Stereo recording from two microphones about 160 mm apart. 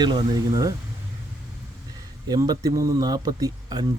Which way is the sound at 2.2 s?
25° right (ahead or behind).